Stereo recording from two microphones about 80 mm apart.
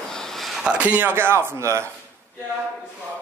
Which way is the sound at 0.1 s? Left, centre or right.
Centre.